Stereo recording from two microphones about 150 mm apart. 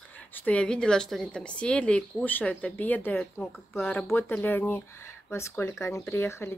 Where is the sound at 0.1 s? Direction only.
10° left (ahead or behind).